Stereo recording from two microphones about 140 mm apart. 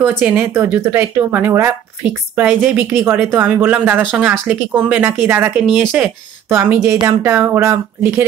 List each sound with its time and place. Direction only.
0.2 s speech: 10° right (ahead or behind)